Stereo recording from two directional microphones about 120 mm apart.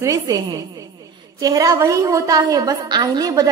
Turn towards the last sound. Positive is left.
turn(degrees=-35)  # may be behind; listen again after turning